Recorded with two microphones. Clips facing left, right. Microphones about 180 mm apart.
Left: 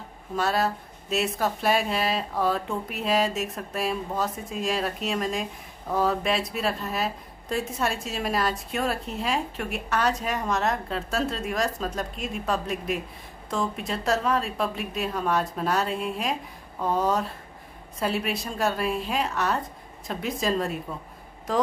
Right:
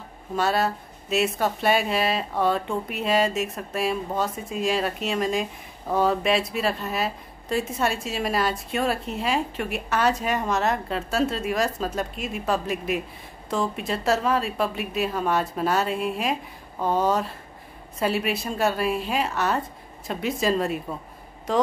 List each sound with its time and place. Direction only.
0.4 s speech: centre (ahead or behind)